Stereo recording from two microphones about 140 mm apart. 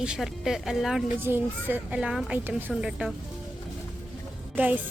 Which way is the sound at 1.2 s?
15° right (ahead or behind).